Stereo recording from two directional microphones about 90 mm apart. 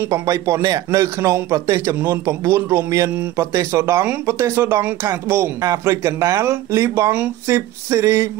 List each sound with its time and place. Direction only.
0.1 s a man's voice: 35° right (ahead or behind)